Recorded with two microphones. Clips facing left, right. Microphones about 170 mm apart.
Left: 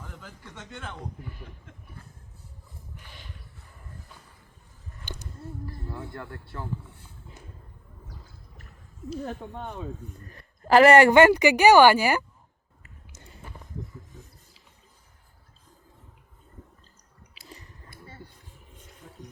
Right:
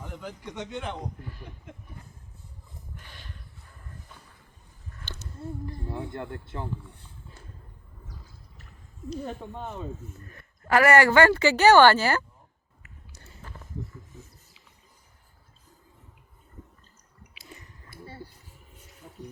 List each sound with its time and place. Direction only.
5.0 s a sound: 15° left (ahead or behind)
5.6 s speech: 20° right (ahead or behind)
9.0 s speech: centre (ahead or behind)
10.2 s a woman's voice: 30° left (ahead or behind); by 12.2 s 15° left (ahead or behind)
13.1 s a sound: 15° left (ahead or behind)
17.4 s squish: 35° left (ahead or behind)